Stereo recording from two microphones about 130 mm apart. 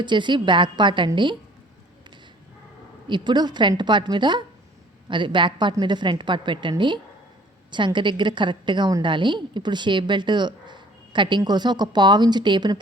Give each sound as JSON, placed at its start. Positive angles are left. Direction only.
{"t": 0.0, "sound": "a woman's voice", "side_deg": -35}
{"t": 3.1, "sound": "a woman's voice", "side_deg": -35}